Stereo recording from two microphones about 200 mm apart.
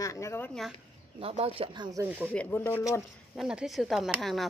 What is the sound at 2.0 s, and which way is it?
Speech, 10° right (ahead or behind).